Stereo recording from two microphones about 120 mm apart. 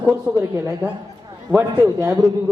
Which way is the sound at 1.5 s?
10° right (ahead or behind).